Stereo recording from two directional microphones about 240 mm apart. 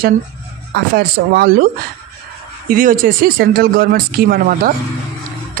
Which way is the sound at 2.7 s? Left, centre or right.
Right.